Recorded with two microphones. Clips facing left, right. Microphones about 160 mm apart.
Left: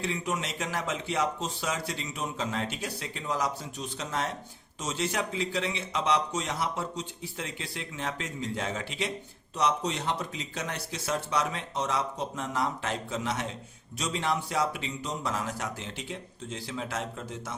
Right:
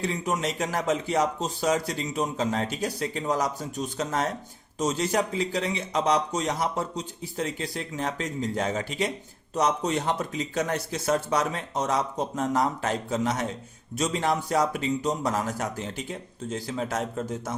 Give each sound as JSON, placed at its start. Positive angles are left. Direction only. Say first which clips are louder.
{"t": 0.0, "sound": "speech", "louder": "right 4 dB", "side_deg": -40}